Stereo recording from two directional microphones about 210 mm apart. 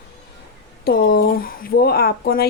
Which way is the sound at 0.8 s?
45° left (ahead or behind).